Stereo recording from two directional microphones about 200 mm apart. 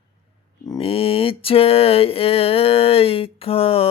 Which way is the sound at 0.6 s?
25° left (ahead or behind).